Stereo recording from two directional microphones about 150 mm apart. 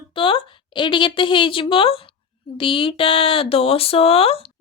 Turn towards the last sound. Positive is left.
turn(degrees=40)  # may be behind; listen again after turning